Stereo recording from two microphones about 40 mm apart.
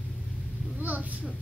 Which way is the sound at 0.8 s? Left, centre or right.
Right.